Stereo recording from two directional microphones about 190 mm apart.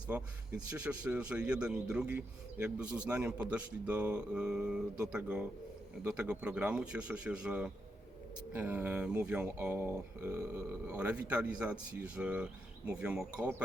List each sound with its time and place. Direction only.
0.1 s a man's voice: 5° right (ahead or behind)